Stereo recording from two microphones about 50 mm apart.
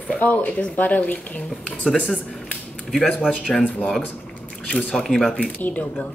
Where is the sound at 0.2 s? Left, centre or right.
Left.